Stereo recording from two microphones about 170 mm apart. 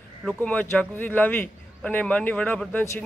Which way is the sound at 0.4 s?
10° left (ahead or behind).